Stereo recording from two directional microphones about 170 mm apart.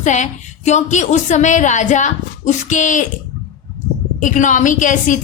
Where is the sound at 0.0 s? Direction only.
45° left (ahead or behind).